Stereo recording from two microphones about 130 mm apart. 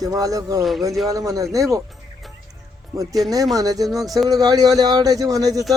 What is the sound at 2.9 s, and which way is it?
Speech, 25° right (ahead or behind).